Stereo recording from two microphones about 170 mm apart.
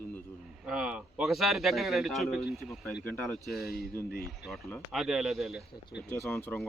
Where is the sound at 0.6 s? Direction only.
5° right (ahead or behind).